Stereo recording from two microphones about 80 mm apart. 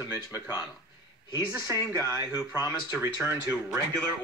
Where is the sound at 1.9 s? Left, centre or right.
Right.